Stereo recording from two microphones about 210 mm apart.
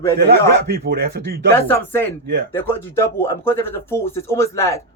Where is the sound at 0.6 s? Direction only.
50° right (ahead or behind).